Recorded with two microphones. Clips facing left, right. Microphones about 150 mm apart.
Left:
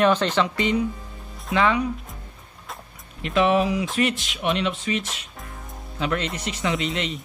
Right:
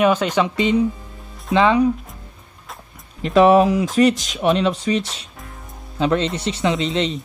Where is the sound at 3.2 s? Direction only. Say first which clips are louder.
Right 7 dB; 40° right (ahead or behind).